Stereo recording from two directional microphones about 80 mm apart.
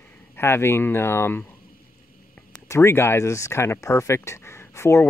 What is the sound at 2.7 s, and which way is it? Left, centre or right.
Speech, left.